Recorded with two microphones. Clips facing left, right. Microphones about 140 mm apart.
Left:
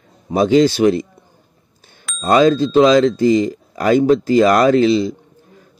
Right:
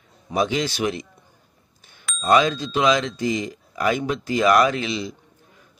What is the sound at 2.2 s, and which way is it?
Speech, 35° left (ahead or behind).